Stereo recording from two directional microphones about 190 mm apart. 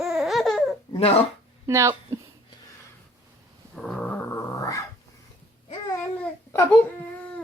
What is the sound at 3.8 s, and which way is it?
Dog, 5° left (ahead or behind).